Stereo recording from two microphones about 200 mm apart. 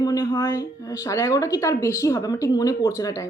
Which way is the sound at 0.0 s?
15° left (ahead or behind).